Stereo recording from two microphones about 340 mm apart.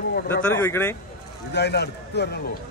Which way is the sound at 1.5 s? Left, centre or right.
Left.